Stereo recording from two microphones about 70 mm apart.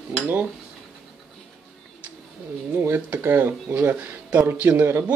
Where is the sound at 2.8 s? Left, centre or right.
Right.